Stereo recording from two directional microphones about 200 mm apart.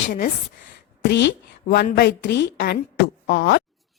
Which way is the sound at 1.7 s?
55° left (ahead or behind).